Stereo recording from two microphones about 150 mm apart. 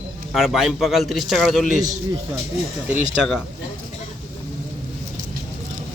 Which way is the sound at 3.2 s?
Centre (ahead or behind).